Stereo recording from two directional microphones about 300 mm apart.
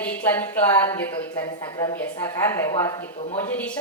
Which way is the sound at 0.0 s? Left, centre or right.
Centre.